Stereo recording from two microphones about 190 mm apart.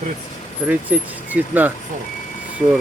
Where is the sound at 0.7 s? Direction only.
10° right (ahead or behind).